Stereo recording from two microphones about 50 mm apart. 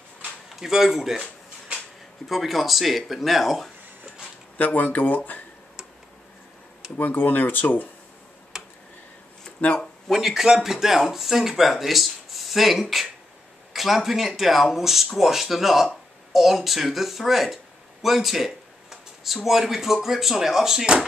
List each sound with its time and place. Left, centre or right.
0.6 s speech: centre
2.2 s speech: centre
4.6 s speech: left
7.0 s speech: left
8.5 s tick-tock: centre
9.6 s speech: left
10.1 s speech: centre